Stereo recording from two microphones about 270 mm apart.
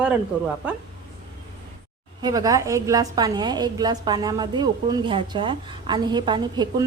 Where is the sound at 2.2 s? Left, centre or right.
Centre.